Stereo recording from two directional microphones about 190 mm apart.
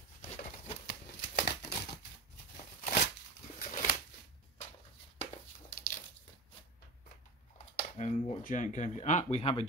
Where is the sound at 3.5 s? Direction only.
45° left (ahead or behind).